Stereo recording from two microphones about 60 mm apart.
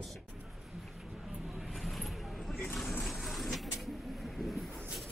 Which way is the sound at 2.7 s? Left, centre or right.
Centre.